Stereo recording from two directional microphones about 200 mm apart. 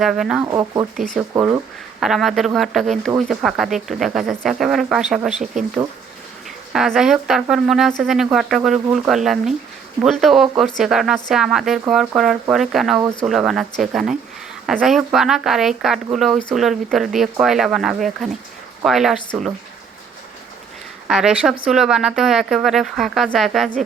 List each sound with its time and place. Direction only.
0.0 s speech: centre (ahead or behind)
0.4 s speech: 15° right (ahead or behind); by 5.3 s centre (ahead or behind)
6.7 s speech: centre (ahead or behind)
21.1 s speech: 5° right (ahead or behind)